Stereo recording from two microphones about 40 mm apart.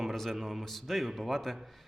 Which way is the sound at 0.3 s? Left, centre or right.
Centre.